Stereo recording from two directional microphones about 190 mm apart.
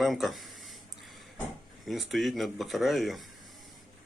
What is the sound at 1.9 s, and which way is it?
Speech, centre (ahead or behind).